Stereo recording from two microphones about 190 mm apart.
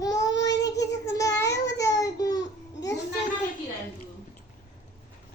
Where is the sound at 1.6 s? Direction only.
15° left (ahead or behind).